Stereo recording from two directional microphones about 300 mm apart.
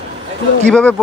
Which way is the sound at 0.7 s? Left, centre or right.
Centre.